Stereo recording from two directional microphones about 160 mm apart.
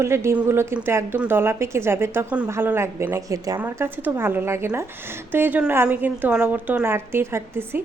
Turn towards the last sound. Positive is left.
turn(degrees=-15)  # may be behind; listen again after turning